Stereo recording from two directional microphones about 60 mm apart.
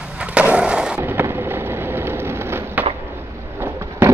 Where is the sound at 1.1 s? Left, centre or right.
Right.